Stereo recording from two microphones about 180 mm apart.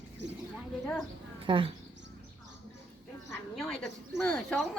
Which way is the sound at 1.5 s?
25° right (ahead or behind).